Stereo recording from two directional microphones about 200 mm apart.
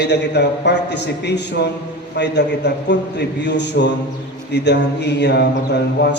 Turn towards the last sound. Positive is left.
turn(degrees=55)  # may be behind; listen again after turning